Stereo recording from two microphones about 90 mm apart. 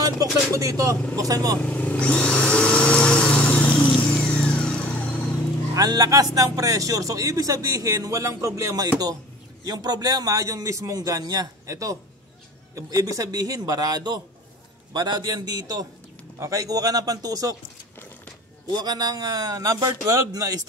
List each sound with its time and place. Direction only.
0.0 s a man's voice: 40° right (ahead or behind)
1.6 s vehicle: 15° left (ahead or behind)
5.8 s a man's voice: 45° right (ahead or behind)
16.3 s a man's voice: 40° right (ahead or behind)
18.7 s a man's voice: 50° right (ahead or behind)